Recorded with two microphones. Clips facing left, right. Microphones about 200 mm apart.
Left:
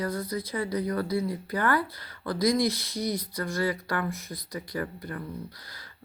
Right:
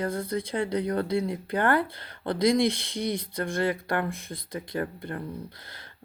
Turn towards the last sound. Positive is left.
turn(degrees=-25)  # may be behind; listen again after turning